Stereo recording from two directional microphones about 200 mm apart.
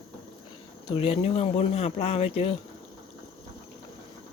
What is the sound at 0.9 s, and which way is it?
Speech, 30° left (ahead or behind).